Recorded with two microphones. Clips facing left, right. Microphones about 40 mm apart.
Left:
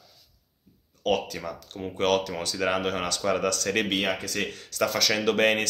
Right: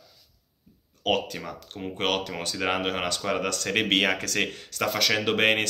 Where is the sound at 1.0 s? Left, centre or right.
Right.